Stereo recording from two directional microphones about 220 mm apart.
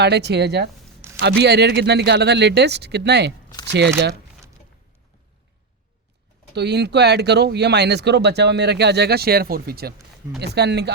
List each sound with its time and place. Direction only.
0.0 s speech: 50° right (ahead or behind)
6.5 s speech: 50° right (ahead or behind)